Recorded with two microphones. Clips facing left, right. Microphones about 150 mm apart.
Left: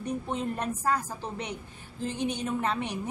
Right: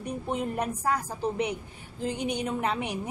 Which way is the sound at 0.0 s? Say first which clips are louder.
Even; 10° right (ahead or behind).